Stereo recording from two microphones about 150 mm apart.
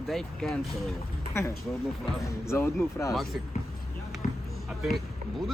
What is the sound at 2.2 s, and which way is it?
Speech, 20° left (ahead or behind).